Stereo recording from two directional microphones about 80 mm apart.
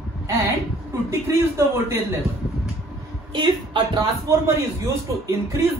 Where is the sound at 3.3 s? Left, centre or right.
Right.